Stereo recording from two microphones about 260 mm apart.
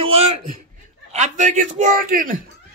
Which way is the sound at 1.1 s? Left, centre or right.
Right.